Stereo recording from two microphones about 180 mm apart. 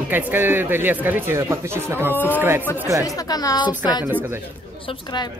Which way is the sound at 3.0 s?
20° left (ahead or behind).